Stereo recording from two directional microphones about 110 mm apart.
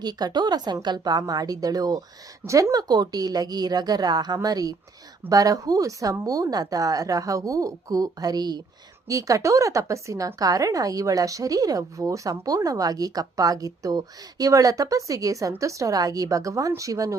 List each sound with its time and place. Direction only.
0.0 s speech: 40° right (ahead or behind)